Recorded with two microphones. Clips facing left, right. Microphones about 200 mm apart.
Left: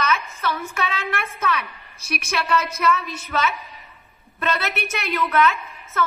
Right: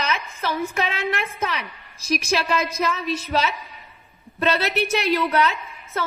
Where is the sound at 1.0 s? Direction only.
30° right (ahead or behind).